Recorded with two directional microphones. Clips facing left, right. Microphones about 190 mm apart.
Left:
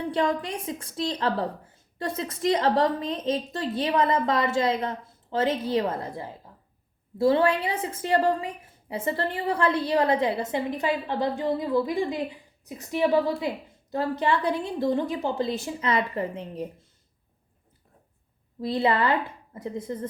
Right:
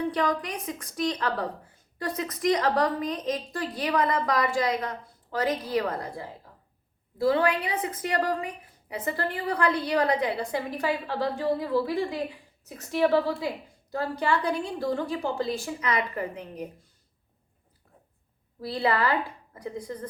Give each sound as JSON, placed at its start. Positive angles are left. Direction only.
{"t": 0.1, "sound": "a woman's voice", "side_deg": 25}
{"t": 18.6, "sound": "a woman's voice", "side_deg": 20}